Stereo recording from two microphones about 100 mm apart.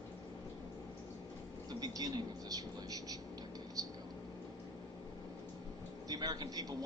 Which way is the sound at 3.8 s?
40° right (ahead or behind).